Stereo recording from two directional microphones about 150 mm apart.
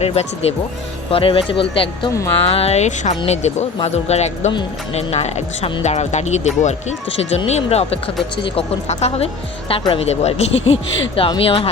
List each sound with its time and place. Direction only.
0.0 s speech: 45° left (ahead or behind)